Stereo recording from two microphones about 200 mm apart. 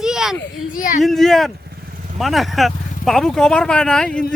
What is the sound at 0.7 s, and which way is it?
Speech, 40° left (ahead or behind).